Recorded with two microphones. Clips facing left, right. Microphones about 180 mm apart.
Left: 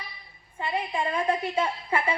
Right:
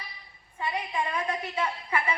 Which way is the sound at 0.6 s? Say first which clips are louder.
Left 2 dB; 25° left (ahead or behind).